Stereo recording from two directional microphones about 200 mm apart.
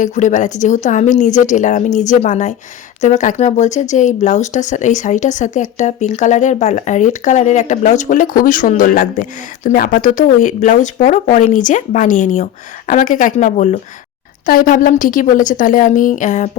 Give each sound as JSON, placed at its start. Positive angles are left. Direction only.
{"t": 0.0, "sound": "speech", "side_deg": 40}